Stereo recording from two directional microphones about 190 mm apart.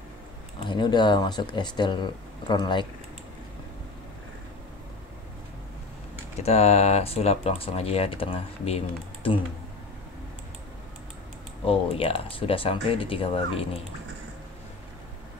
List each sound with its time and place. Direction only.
0.6 s speech: 25° left (ahead or behind)
6.4 s speech: 35° left (ahead or behind)
11.6 s speech: 30° left (ahead or behind)